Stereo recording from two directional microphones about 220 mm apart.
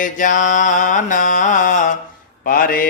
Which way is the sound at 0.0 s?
35° left (ahead or behind).